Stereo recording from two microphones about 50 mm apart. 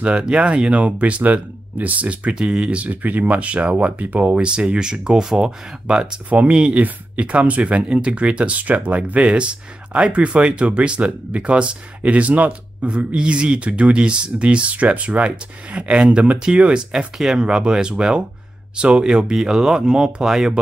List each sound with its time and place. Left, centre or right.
0.0 s speech: right
2.3 s speech: centre
4.4 s speech: centre
6.3 s speech: right
17.2 s speech: centre